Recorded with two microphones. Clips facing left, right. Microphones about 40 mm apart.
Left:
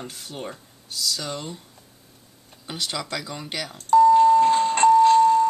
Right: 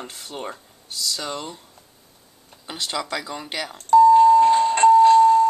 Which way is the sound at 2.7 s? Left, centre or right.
Centre.